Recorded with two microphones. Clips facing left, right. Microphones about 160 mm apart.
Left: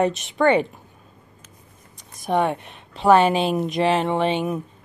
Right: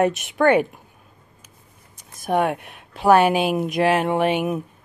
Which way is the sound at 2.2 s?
5° right (ahead or behind).